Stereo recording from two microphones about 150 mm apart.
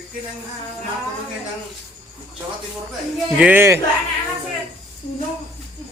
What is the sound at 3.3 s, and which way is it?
Speech, 10° right (ahead or behind).